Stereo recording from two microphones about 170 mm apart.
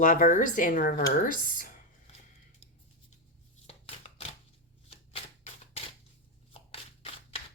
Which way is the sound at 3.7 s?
35° left (ahead or behind).